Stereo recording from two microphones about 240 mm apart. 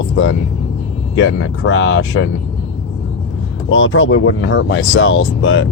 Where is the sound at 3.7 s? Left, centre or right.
Left.